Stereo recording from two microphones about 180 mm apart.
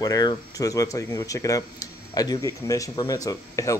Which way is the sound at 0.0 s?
20° left (ahead or behind).